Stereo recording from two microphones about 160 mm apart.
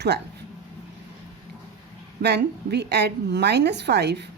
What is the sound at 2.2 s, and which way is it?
A woman's voice, 90° right.